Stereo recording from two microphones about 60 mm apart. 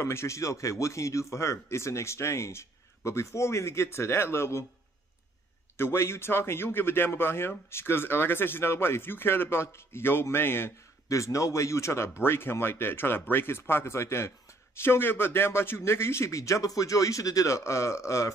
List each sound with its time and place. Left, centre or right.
0.0 s speech: left
5.8 s a man's voice: left
11.1 s a man's voice: left
12.2 s a man's voice: left